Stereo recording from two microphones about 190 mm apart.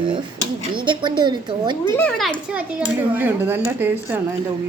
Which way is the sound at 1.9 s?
5° left (ahead or behind).